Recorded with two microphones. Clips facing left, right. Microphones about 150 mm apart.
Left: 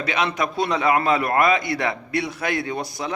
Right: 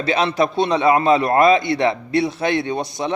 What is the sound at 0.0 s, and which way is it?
A man's voice, 30° right (ahead or behind).